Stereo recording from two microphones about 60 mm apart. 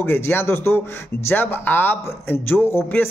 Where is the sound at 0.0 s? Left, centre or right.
Left.